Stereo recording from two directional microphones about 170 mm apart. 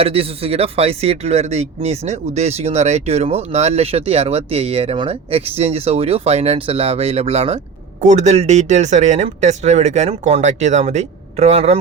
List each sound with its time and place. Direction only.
0.0 s speech: 35° right (ahead or behind)